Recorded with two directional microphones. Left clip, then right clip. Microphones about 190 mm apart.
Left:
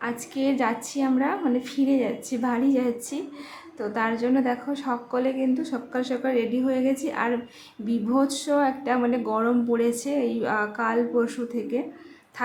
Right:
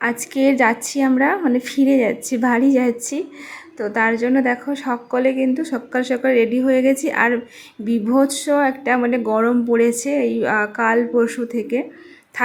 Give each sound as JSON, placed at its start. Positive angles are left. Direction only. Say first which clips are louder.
{"t": 0.0, "sound": "speech", "louder": "right 9 dB", "side_deg": -30}